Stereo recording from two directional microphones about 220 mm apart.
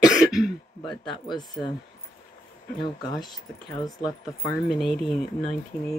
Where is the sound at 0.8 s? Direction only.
20° left (ahead or behind).